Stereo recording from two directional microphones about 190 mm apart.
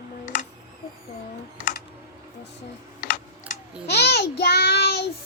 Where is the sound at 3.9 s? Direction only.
60° left (ahead or behind).